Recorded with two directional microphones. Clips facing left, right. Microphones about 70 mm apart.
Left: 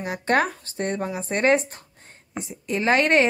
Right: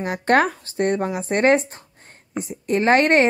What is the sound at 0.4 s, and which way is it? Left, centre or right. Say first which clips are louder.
Speech: right 4 dB; right.